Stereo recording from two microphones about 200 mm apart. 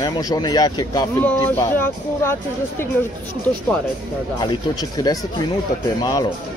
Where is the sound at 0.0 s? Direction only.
20° left (ahead or behind).